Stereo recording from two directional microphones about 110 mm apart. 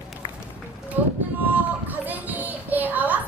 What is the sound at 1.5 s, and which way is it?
Music, 15° right (ahead or behind).